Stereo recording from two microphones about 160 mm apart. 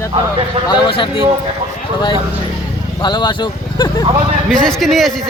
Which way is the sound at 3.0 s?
30° left (ahead or behind).